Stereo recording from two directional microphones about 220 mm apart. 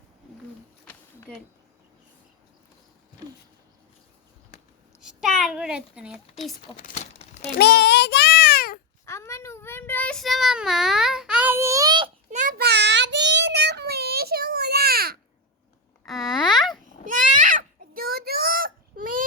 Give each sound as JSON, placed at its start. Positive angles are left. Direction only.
{"t": 4.9, "sound": "a child's voice", "side_deg": -5}
{"t": 6.7, "sound": "speech", "side_deg": 35}
{"t": 7.6, "sound": "child singing", "side_deg": 50}
{"t": 9.0, "sound": "child singing", "side_deg": 10}
{"t": 16.0, "sound": "babbling", "side_deg": 0}
{"t": 16.5, "sound": "babbling", "side_deg": 20}
{"t": 17.1, "sound": "a sound", "side_deg": -35}